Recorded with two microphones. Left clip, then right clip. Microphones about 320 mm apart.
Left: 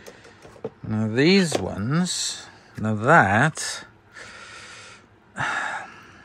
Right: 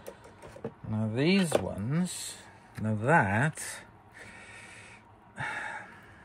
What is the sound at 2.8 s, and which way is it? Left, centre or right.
Gasp, centre.